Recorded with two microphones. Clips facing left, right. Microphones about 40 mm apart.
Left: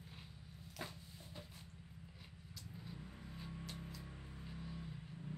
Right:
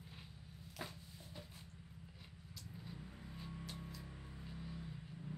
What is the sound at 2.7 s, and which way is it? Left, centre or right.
Vehicle, centre.